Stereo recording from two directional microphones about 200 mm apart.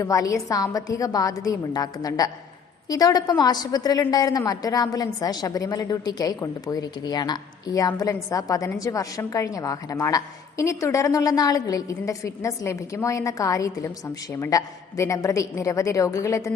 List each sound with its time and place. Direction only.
0.0 s a woman's voice: 15° left (ahead or behind)